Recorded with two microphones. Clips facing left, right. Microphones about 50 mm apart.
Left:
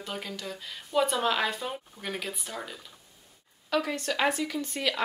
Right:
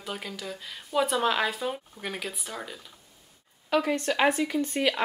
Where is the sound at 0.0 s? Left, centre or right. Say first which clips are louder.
Right 1 dB; centre.